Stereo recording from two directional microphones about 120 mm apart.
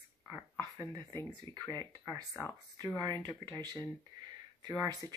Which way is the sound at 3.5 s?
35° right (ahead or behind).